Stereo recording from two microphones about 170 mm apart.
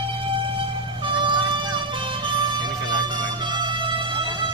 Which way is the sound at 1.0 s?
30° right (ahead or behind).